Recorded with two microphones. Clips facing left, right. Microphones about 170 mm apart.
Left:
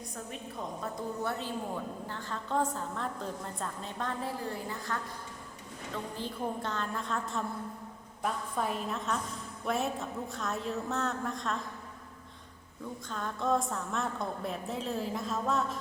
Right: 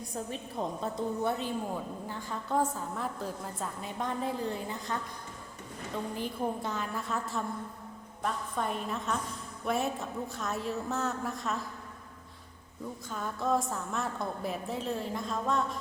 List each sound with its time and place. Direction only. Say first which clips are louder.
0.8 s a woman's voice: right 2 dB; 20° right (ahead or behind)
6.1 s a woman's voice: right 2 dB; 10° right (ahead or behind)
13.1 s a woman's voice: even; 5° right (ahead or behind)